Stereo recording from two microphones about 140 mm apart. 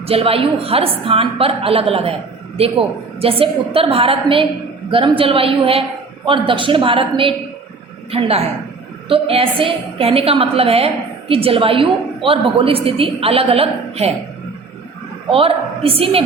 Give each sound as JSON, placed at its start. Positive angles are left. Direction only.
{"t": 0.1, "sound": "a woman's voice", "side_deg": -45}
{"t": 9.0, "sound": "a woman's voice", "side_deg": -40}
{"t": 15.3, "sound": "a woman's voice", "side_deg": -40}